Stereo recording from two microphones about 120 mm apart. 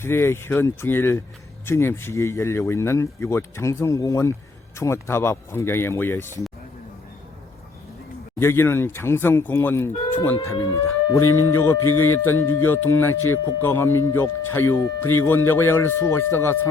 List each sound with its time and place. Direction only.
0.0 s speech: 20° left (ahead or behind)
8.4 s speech: 20° left (ahead or behind)